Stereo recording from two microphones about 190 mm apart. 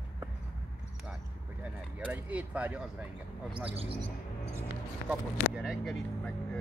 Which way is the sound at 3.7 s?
30° right (ahead or behind).